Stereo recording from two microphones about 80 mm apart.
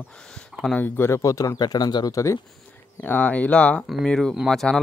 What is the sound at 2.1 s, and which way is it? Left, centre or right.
Speech, left.